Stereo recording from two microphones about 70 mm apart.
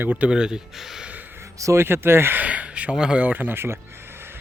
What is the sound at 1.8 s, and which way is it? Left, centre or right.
Speech, right.